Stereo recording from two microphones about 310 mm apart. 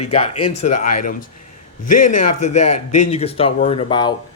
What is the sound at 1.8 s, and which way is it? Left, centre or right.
Speech, left.